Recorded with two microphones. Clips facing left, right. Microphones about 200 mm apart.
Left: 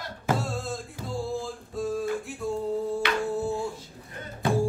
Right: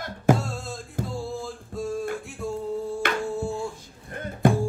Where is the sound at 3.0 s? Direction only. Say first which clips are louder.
Right 3 dB; 50° right (ahead or behind).